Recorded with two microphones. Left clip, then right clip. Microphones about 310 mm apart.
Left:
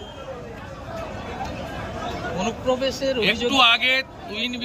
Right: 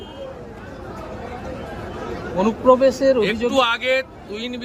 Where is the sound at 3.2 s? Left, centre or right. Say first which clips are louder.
Even; centre.